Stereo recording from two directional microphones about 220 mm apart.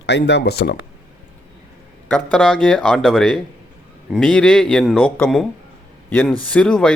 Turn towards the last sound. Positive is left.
turn(degrees=5)  # may be behind; listen again after turning